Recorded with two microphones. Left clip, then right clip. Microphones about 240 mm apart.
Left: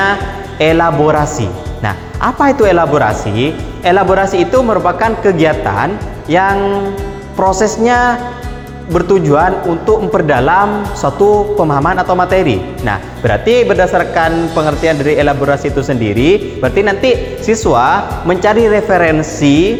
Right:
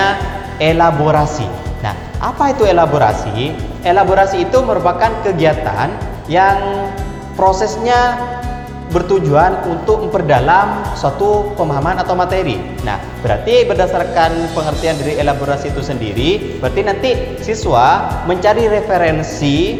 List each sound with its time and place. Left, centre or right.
0.6 s speech: left